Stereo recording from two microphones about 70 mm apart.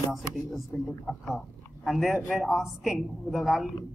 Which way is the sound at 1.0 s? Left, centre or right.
Centre.